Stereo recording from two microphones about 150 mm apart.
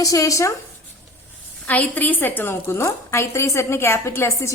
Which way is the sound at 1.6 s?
10° left (ahead or behind).